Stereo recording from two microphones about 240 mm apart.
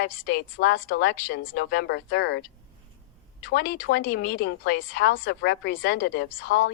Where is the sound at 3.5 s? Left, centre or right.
Left.